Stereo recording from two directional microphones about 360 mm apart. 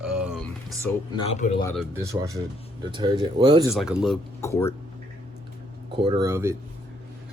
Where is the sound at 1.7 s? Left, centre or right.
Centre.